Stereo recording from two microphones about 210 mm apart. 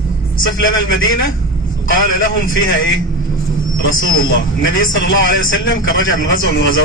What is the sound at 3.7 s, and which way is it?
A man's voice, 70° left (ahead or behind).